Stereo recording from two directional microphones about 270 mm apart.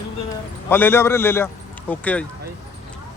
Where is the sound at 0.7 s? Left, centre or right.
Centre.